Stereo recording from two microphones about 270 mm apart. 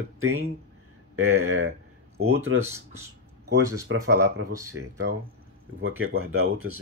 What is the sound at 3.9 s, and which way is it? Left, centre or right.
Speech, right.